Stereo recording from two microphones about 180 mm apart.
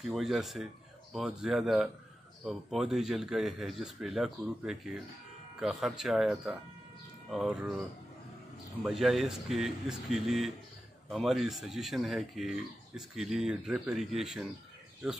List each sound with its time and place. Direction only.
0.0 s speech: centre (ahead or behind)
8.8 s speech: centre (ahead or behind)